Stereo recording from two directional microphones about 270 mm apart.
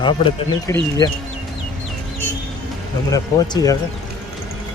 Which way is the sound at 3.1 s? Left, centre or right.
Centre.